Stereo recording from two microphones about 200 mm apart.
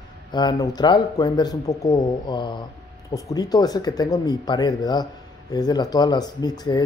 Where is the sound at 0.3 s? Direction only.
20° left (ahead or behind).